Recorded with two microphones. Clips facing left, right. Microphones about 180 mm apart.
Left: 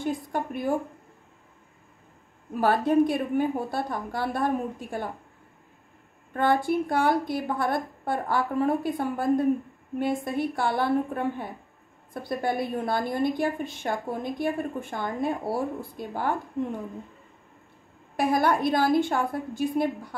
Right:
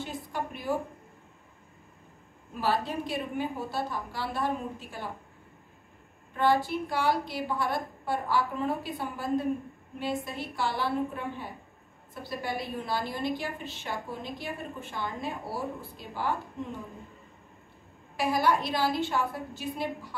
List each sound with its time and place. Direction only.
0.0 s a woman's voice: 50° left (ahead or behind)
2.6 s a woman's voice: 50° left (ahead or behind)
6.3 s a woman's voice: 50° left (ahead or behind)
18.1 s a woman's voice: 55° left (ahead or behind)